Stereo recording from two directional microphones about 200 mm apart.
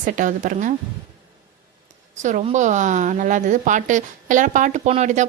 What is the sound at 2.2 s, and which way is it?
A woman's voice, 35° right (ahead or behind).